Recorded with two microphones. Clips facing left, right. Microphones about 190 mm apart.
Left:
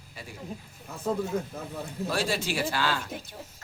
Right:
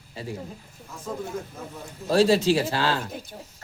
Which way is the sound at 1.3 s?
60° left (ahead or behind).